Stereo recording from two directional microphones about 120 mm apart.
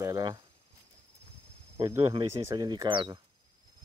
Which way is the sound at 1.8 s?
25° right (ahead or behind).